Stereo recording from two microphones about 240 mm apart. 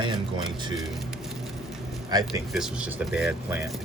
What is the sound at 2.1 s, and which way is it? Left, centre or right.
Speech, centre.